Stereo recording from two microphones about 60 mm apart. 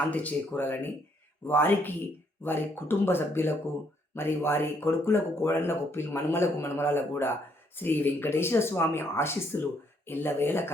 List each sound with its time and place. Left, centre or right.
0.1 s speech: left